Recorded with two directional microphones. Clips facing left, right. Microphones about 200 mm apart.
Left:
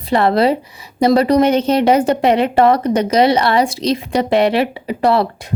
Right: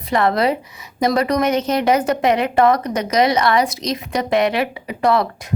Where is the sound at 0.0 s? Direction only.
30° left (ahead or behind).